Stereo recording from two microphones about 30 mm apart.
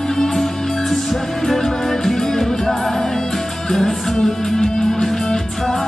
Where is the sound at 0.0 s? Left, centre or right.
Centre.